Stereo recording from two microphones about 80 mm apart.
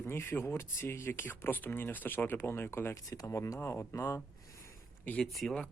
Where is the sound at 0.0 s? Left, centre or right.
Left.